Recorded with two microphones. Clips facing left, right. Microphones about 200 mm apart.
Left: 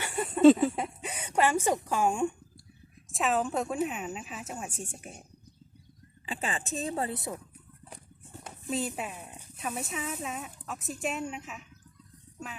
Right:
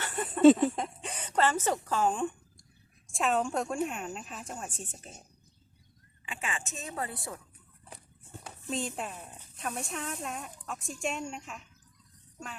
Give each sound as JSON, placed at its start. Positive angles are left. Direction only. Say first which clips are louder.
{"t": 0.0, "sound": "a sound", "louder": "left 2 dB", "side_deg": 10}
{"t": 0.3, "sound": "a woman's voice", "louder": "left 1 dB", "side_deg": 5}
{"t": 6.2, "sound": "speech", "louder": "left 4 dB", "side_deg": 35}
{"t": 8.7, "sound": "speech", "louder": "left 2 dB", "side_deg": 5}